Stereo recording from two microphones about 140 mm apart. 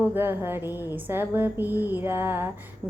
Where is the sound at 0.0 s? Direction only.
15° right (ahead or behind).